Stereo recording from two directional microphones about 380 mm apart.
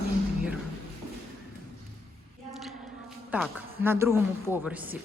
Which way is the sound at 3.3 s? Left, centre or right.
Centre.